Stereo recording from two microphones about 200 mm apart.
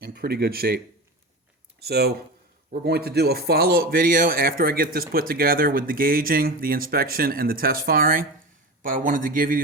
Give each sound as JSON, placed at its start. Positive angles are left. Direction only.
{"t": 0.0, "sound": "speech", "side_deg": -50}
{"t": 1.8, "sound": "speech", "side_deg": -55}